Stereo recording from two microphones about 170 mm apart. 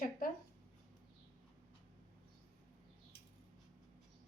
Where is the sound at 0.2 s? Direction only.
55° left (ahead or behind).